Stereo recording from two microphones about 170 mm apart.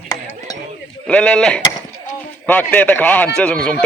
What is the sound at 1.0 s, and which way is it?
Speech, 5° left (ahead or behind).